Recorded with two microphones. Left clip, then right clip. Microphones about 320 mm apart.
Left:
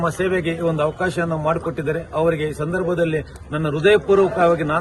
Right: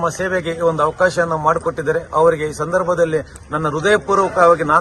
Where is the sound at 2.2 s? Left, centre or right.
Right.